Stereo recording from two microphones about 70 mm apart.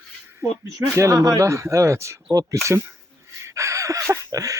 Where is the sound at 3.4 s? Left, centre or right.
Right.